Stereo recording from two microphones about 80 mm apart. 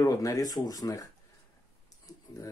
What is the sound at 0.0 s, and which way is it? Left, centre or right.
Speech, left.